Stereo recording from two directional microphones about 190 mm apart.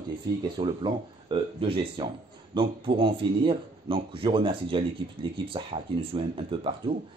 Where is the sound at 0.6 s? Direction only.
25° right (ahead or behind).